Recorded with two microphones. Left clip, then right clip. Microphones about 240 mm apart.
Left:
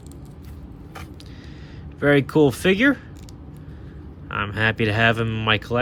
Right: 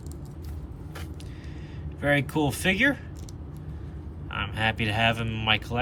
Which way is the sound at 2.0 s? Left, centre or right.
Centre.